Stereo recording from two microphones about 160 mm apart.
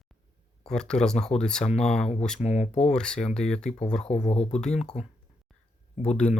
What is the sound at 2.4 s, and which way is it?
Speech, 45° left (ahead or behind).